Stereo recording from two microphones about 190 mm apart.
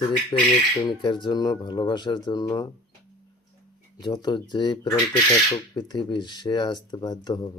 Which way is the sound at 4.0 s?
20° left (ahead or behind).